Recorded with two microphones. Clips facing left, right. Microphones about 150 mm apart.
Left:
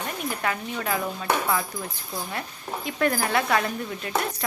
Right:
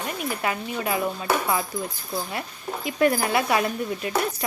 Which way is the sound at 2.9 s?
15° right (ahead or behind).